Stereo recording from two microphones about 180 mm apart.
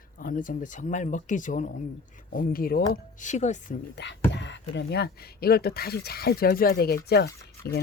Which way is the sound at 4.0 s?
75° left (ahead or behind).